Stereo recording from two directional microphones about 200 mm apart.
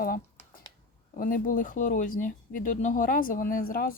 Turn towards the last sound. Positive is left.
turn(degrees=45)  # may be behind; listen again after turning